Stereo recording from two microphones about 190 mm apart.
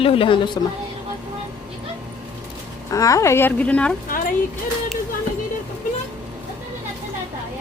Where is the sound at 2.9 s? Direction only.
15° left (ahead or behind).